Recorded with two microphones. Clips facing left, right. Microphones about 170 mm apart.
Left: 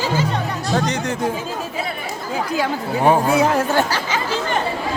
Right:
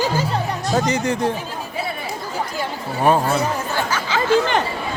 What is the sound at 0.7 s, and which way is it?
Speech, centre (ahead or behind).